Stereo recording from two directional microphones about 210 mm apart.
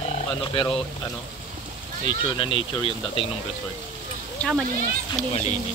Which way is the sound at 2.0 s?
25° left (ahead or behind).